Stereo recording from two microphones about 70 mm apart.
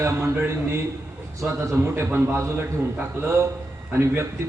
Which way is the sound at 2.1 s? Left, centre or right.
Right.